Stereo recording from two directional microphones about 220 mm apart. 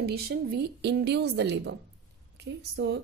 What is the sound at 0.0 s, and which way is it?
A woman's voice, 45° right (ahead or behind).